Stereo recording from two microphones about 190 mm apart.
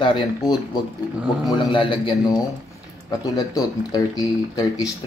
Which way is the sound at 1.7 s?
25° left (ahead or behind).